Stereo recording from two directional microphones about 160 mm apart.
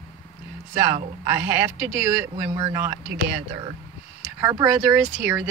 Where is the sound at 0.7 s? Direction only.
15° right (ahead or behind).